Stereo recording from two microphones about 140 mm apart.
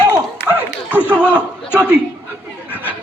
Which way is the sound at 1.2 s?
10° left (ahead or behind).